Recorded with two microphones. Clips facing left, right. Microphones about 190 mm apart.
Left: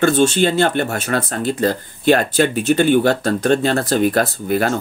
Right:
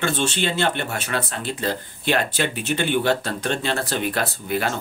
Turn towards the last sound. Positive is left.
turn(degrees=45)  # may be behind; listen again after turning